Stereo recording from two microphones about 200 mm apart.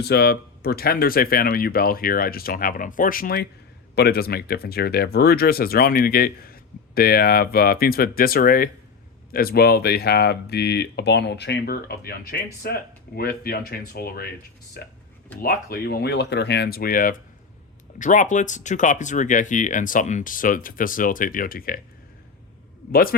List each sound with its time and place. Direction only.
0.0 s speech: 55° left (ahead or behind)